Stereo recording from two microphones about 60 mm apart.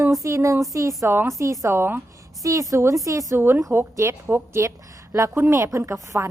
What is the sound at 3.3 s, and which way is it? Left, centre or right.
A woman's voice, right.